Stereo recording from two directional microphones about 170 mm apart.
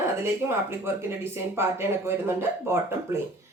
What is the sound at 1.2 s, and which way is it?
Speech, 15° right (ahead or behind).